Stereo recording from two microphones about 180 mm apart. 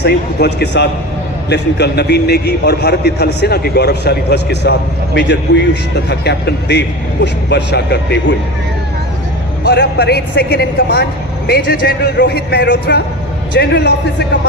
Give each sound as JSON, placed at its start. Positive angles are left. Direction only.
{"t": 0.0, "sound": "a man's voice", "side_deg": 65}
{"t": 9.6, "sound": "a man's voice", "side_deg": 65}